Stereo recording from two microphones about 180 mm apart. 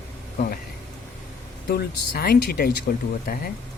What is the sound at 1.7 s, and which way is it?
Speech, 55° left (ahead or behind).